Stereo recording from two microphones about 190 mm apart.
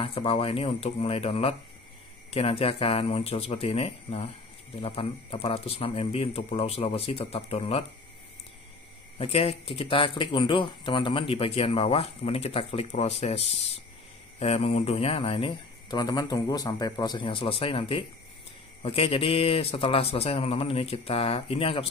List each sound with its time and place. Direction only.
0.0 s speech: 30° left (ahead or behind)
9.2 s speech: 30° left (ahead or behind)